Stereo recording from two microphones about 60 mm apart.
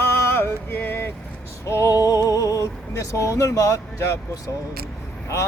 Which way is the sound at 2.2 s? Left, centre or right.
Left.